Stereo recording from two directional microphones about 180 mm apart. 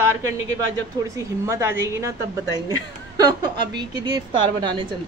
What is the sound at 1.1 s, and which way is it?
A woman's voice, 15° right (ahead or behind).